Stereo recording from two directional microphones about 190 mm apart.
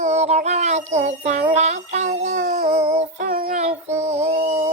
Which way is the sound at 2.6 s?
35° right (ahead or behind).